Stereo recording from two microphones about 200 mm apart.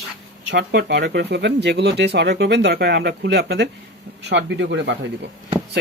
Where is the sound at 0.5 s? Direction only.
55° right (ahead or behind).